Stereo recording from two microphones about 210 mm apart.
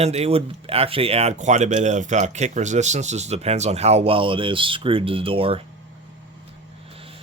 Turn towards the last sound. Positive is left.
turn(degrees=-25)  # may be behind; listen again after turning